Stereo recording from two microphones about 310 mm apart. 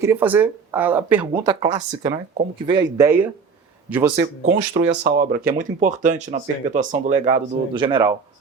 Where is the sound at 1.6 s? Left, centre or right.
Right.